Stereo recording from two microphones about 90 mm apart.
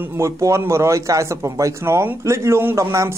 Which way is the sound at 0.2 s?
35° right (ahead or behind).